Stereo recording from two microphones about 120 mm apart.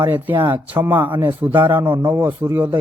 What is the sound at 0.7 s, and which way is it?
A man's voice, 15° right (ahead or behind).